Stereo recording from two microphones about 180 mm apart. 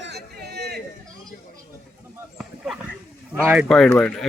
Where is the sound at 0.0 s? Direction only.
65° right (ahead or behind).